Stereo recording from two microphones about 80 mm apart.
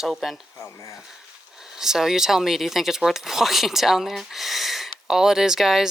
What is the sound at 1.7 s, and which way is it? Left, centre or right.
Speech, centre.